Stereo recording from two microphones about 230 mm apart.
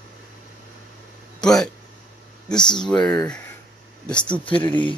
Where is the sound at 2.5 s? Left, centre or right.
Centre.